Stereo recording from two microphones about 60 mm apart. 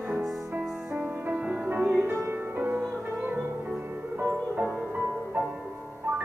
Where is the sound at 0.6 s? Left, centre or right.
Centre.